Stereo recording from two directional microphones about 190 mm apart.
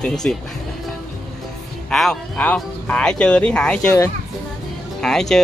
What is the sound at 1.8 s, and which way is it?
Speech, 5° left (ahead or behind).